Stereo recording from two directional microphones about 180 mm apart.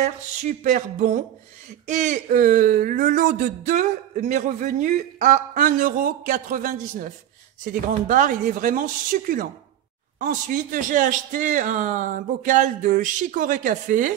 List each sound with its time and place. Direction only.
0.0 s speech: 45° right (ahead or behind)